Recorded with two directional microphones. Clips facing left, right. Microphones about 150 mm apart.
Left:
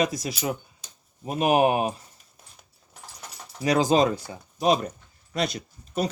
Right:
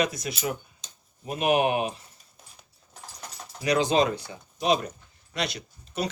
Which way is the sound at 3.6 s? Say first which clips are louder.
Left 2 dB; 40° left (ahead or behind).